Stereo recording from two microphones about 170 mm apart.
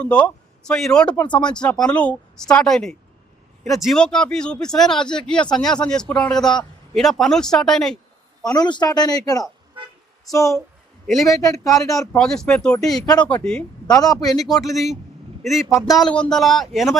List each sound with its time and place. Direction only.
0.0 s speech: 5° left (ahead or behind)
1.1 s speech: 25° left (ahead or behind)
1.4 s speech: 5° left (ahead or behind)
8.4 s speech: 25° left (ahead or behind)
11.9 s speech: 5° left (ahead or behind)
13.8 s a man's voice: 20° left (ahead or behind)
15.4 s speech: centre (ahead or behind)